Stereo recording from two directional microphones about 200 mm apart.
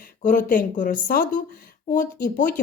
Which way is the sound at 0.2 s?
40° left (ahead or behind).